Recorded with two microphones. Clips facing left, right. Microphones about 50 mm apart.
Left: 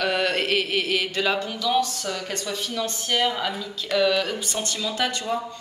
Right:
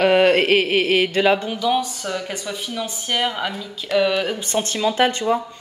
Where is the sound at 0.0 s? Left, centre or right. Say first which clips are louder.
Right 9 dB; right; by 4.4 s centre.